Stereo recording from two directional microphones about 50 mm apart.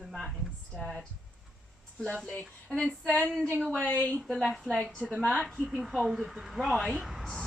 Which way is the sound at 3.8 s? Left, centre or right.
Left.